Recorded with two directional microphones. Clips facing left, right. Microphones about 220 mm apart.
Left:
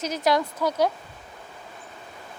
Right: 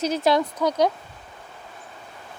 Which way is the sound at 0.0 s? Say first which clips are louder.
Right 3 dB; 30° right (ahead or behind).